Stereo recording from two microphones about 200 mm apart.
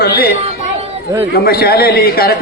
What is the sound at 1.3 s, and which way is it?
A man's voice, 50° left (ahead or behind).